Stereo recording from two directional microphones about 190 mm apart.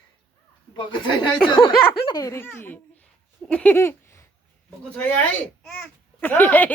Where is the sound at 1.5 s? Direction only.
25° left (ahead or behind).